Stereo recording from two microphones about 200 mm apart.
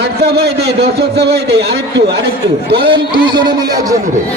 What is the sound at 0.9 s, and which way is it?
Speech, 55° right (ahead or behind).